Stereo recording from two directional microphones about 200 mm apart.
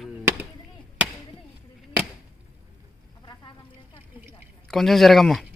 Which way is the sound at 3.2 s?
20° left (ahead or behind).